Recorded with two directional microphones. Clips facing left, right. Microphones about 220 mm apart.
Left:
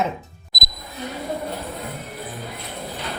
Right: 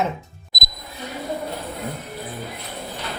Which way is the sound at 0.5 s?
Centre (ahead or behind).